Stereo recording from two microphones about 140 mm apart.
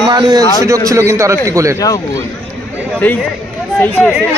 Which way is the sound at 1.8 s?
25° left (ahead or behind).